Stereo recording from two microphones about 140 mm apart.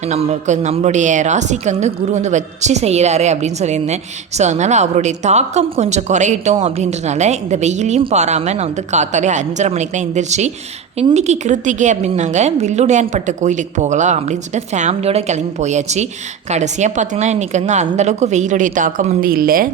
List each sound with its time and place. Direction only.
0.1 s a woman's voice: 50° right (ahead or behind); by 19.6 s 90° right